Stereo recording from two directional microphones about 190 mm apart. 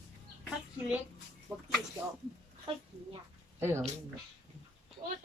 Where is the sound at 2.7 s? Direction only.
30° right (ahead or behind).